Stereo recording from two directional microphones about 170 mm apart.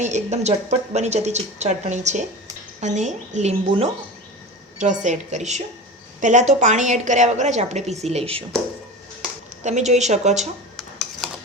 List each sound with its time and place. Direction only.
0.0 s a woman's voice: 45° right (ahead or behind)
9.6 s speech: 40° right (ahead or behind)
10.8 s dishes: centre (ahead or behind)